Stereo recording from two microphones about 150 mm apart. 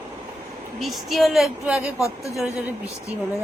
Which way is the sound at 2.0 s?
20° left (ahead or behind).